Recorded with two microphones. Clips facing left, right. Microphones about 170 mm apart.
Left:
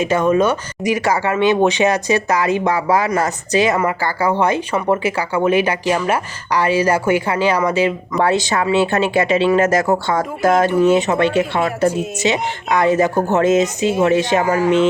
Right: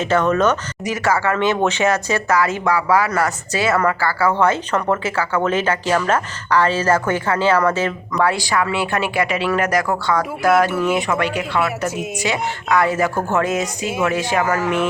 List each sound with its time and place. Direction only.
0.0 s speech: 10° left (ahead or behind)